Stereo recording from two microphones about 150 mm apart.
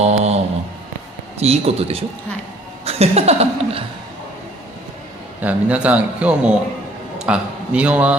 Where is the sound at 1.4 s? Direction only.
45° right (ahead or behind).